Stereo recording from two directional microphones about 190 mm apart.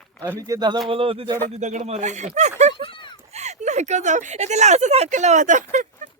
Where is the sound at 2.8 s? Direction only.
30° left (ahead or behind).